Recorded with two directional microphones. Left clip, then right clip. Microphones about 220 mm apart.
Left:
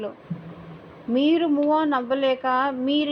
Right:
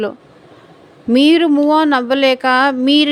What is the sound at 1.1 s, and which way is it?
Speech, 55° right (ahead or behind).